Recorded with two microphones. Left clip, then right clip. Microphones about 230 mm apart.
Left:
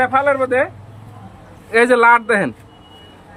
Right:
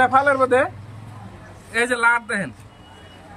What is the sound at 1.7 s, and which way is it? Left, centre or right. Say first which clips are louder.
Speech: left 7 dB; centre.